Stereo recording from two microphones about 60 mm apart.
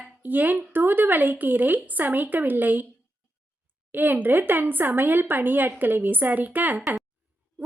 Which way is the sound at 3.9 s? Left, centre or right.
Right.